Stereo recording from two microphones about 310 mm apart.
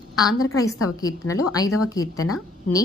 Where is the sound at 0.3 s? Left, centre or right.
Left.